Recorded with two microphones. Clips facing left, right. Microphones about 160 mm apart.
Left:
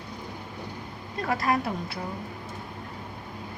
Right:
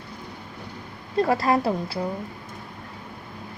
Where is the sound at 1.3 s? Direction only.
30° right (ahead or behind).